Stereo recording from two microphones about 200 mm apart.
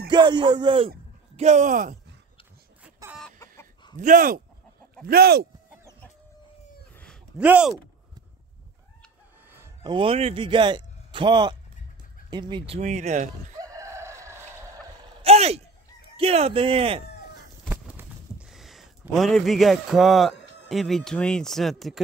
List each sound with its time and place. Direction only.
0.1 s speech: 20° right (ahead or behind); by 2.0 s 40° right (ahead or behind)
2.8 s chicken: 5° right (ahead or behind)
3.3 s chicken: 15° left (ahead or behind)
3.9 s speech: 40° right (ahead or behind)
7.3 s speech: 5° right (ahead or behind)
9.8 s a man's voice: 25° right (ahead or behind)
13.6 s chicken: 15° right (ahead or behind)
15.2 s speech: 30° right (ahead or behind)
17.6 s a sound: 5° right (ahead or behind)
20.6 s speech: centre (ahead or behind)